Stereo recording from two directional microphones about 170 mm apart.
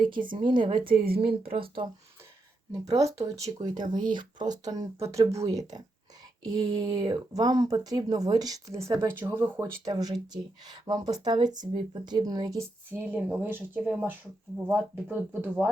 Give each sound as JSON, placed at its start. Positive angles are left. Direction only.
{"t": 0.3, "sound": "speech", "side_deg": -30}
{"t": 0.9, "sound": "a woman's voice", "side_deg": -60}
{"t": 1.2, "sound": "speech", "side_deg": -35}
{"t": 2.8, "sound": "speech", "side_deg": -20}